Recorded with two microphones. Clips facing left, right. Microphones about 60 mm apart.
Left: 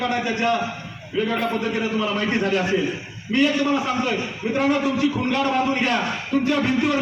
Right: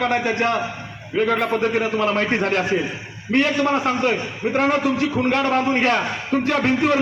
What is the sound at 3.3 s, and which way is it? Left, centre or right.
A man's voice, right.